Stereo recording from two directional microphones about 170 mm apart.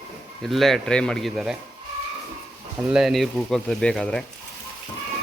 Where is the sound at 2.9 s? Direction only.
5° right (ahead or behind).